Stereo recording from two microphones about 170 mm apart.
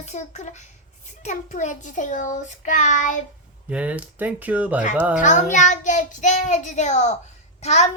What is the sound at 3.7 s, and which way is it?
Speech, 10° right (ahead or behind).